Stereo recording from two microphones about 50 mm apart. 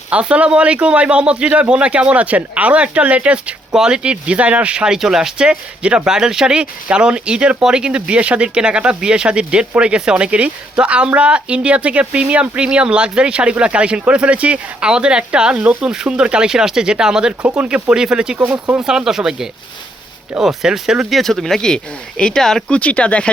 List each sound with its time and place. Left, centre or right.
0.1 s speech: right
4.9 s speech: centre
21.1 s speech: centre
22.7 s speech: left